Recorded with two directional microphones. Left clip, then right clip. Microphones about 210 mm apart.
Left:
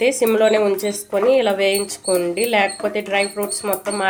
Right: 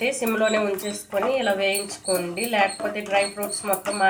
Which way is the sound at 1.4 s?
55° left (ahead or behind).